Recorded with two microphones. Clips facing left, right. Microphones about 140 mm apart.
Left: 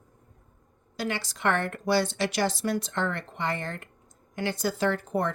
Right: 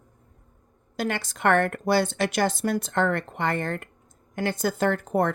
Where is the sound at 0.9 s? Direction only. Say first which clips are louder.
Right 3 dB; 55° right (ahead or behind).